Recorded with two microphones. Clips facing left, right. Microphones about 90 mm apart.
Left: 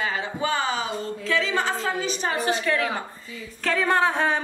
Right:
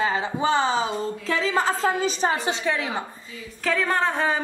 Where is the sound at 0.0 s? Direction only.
30° right (ahead or behind).